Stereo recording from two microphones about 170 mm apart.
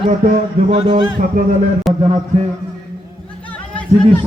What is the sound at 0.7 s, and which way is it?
Speech, 35° right (ahead or behind).